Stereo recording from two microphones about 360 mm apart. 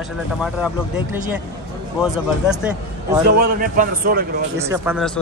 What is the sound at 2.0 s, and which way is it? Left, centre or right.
A man's voice, centre.